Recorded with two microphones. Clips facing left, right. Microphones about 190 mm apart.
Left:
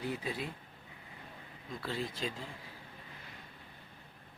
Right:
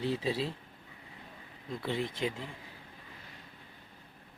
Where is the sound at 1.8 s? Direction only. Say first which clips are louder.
Right 4 dB; 20° right (ahead or behind).